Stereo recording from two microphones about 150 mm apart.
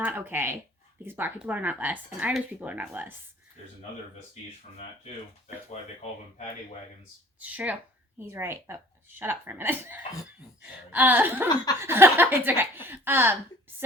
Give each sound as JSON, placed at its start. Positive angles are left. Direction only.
{"t": 0.0, "sound": "speech", "side_deg": -10}
{"t": 7.3, "sound": "speech", "side_deg": -10}
{"t": 11.4, "sound": "a sound", "side_deg": 25}
{"t": 11.8, "sound": "speech", "side_deg": -15}